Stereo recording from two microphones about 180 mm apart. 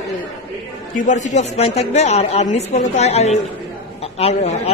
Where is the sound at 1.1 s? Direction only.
40° left (ahead or behind).